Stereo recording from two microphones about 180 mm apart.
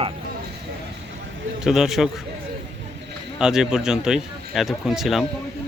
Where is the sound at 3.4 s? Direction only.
5° right (ahead or behind).